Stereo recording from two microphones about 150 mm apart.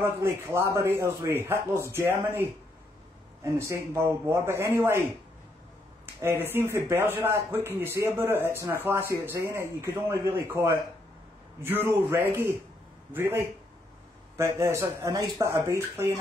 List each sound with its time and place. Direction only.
0.2 s a man's voice: 15° right (ahead or behind)
6.2 s a man's voice: 15° right (ahead or behind)